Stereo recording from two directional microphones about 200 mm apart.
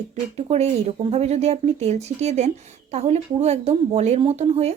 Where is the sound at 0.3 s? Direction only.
35° right (ahead or behind).